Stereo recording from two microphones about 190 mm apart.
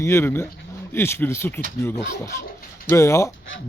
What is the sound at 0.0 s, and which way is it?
Speech, 15° left (ahead or behind).